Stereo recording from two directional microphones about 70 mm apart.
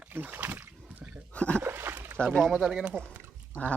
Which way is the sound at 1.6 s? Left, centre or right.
Right.